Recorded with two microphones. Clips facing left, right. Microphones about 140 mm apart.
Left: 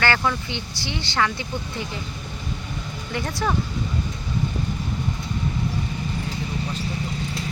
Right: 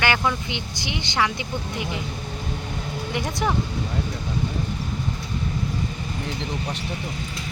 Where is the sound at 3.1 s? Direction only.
15° right (ahead or behind).